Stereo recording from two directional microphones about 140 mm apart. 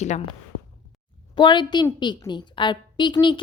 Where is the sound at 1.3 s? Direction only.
35° left (ahead or behind).